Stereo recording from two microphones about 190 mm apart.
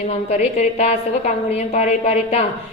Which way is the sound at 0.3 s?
35° left (ahead or behind).